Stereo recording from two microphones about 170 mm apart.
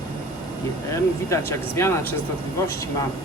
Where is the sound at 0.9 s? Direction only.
15° left (ahead or behind).